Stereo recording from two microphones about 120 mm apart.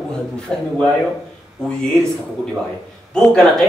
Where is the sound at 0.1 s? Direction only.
5° left (ahead or behind).